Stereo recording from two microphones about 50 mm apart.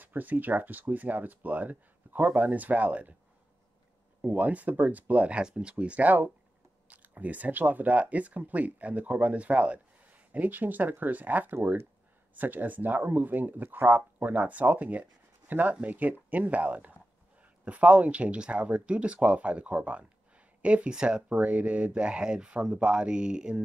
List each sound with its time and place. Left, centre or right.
0.0 s speech: right
4.3 s speech: right
5.4 s speech: centre
20.9 s speech: centre
21.3 s speech: right